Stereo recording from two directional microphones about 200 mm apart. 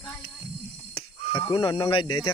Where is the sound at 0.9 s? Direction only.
30° left (ahead or behind).